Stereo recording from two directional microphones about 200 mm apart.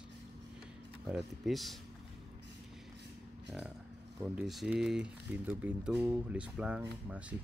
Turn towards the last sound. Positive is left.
turn(degrees=-5)  # may be behind; listen again after turning